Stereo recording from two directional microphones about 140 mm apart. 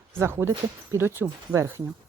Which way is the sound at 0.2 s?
15° right (ahead or behind).